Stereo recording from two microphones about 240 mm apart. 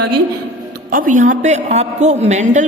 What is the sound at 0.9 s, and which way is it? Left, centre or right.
A woman's voice, right.